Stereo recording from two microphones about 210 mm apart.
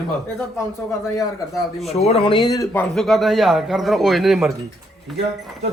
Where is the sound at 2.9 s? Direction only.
Centre (ahead or behind).